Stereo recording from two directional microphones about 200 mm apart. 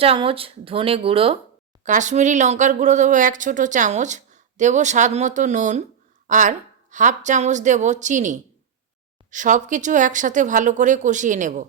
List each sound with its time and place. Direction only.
0.0 s speech: 30° right (ahead or behind)
1.8 s speech: 40° right (ahead or behind)